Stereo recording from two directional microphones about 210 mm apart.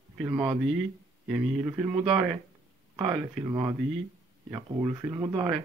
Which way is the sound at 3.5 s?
15° right (ahead or behind).